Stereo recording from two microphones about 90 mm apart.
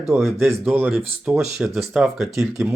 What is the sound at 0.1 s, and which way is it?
Speech, centre (ahead or behind).